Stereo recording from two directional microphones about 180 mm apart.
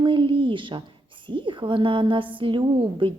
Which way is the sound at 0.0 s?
30° right (ahead or behind).